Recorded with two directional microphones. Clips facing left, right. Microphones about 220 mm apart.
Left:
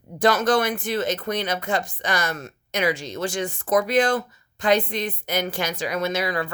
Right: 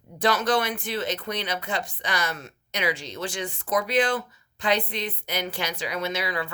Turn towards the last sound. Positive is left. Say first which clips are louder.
# left 4 dB
turn(degrees=45)  # may be behind; listen again after turning